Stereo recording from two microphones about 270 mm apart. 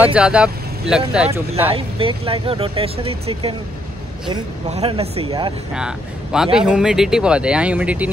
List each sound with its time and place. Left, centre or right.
0.0 s speech: centre
1.7 s speech: centre
5.7 s speech: centre